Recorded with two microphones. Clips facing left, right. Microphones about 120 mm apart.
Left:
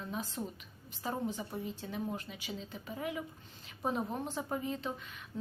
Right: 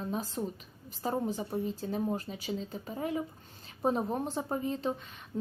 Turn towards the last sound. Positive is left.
turn(degrees=-35)  # may be behind; listen again after turning